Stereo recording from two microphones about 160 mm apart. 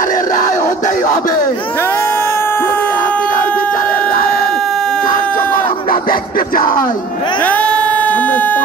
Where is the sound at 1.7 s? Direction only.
15° left (ahead or behind).